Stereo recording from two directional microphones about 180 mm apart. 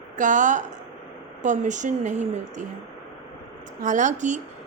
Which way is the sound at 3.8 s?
45° right (ahead or behind).